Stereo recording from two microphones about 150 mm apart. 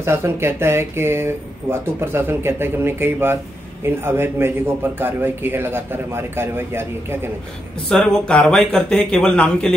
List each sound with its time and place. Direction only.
0.0 s a man's voice: 15° right (ahead or behind)
7.9 s speech: 5° left (ahead or behind)